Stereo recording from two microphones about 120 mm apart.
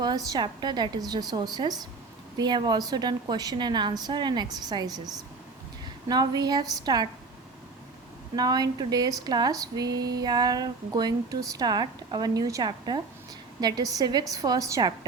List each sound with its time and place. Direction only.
0.0 s speech: 35° right (ahead or behind)
6.1 s speech: 35° right (ahead or behind)
8.4 s speech: 35° right (ahead or behind)